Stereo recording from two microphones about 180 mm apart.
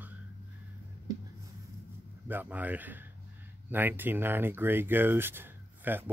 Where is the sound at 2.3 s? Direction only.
10° right (ahead or behind).